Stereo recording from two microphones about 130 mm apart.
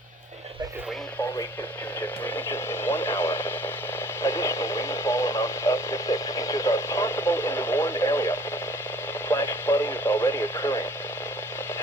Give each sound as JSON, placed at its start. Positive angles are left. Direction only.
{"t": 2.2, "sound": "radio", "side_deg": 15}